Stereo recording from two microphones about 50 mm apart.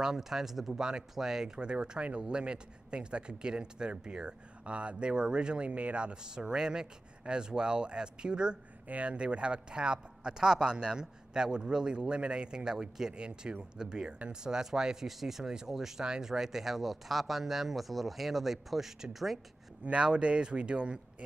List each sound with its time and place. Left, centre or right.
0.0 s a man's voice: centre
8.8 s speech: right; by 19.4 s centre
19.8 s a man's voice: right